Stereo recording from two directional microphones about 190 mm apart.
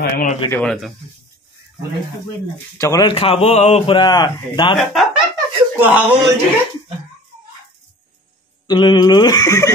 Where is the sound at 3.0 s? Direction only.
30° left (ahead or behind).